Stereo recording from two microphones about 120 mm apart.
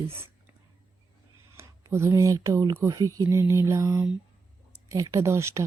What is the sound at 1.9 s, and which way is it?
Speech, 25° right (ahead or behind).